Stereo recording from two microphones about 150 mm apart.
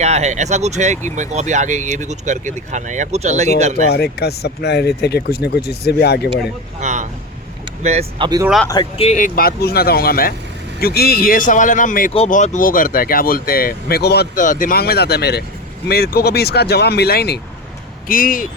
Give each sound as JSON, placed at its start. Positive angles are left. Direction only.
{"t": 0.0, "sound": "speech", "side_deg": -50}
{"t": 3.9, "sound": "speech", "side_deg": 90}
{"t": 6.7, "sound": "vehicle", "side_deg": -55}
{"t": 7.8, "sound": "speech", "side_deg": -45}
{"t": 8.2, "sound": "speech", "side_deg": -25}
{"t": 8.7, "sound": "speech", "side_deg": 30}
{"t": 9.0, "sound": "speech", "side_deg": 60}
{"t": 18.1, "sound": "speech", "side_deg": 65}